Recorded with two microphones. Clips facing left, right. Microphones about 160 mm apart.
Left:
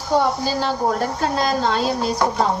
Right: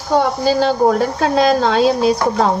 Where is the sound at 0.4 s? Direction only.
90° right.